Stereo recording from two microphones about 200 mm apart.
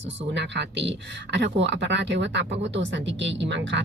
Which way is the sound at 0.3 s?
60° right (ahead or behind).